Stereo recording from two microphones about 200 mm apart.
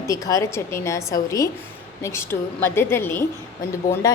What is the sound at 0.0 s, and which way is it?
A woman's voice, 15° left (ahead or behind).